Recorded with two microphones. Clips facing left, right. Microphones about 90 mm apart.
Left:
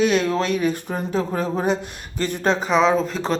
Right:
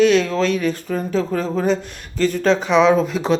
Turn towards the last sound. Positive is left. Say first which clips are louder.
# right 4 dB
turn(degrees=-5)  # may be behind; listen again after turning